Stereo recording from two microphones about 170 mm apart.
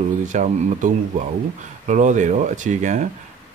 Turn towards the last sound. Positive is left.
turn(degrees=-45)  # may be behind; listen again after turning